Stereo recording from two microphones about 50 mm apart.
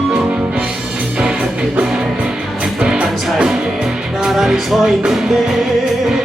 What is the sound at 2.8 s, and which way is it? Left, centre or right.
Music, centre.